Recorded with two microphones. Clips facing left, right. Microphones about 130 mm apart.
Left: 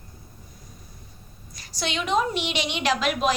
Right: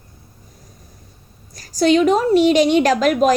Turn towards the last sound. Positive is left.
turn(degrees=-40)  # may be behind; listen again after turning